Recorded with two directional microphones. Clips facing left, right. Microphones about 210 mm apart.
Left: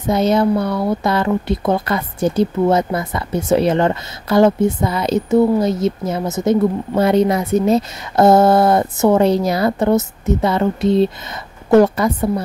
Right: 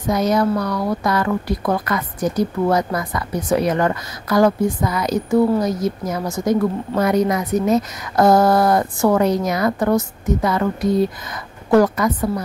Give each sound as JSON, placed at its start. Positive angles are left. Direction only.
{"t": 0.1, "sound": "a woman's voice", "side_deg": 25}